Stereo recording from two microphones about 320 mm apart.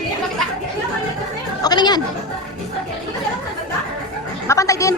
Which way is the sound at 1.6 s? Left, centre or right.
Centre.